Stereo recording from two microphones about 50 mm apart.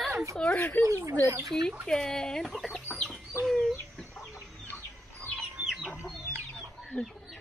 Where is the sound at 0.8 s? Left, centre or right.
Right.